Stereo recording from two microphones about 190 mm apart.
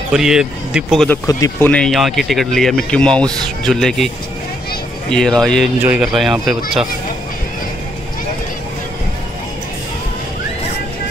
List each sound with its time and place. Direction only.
0.1 s speech: 5° right (ahead or behind)
1.2 s speech: 15° left (ahead or behind)
1.7 s speech: centre (ahead or behind)
5.1 s speech: centre (ahead or behind)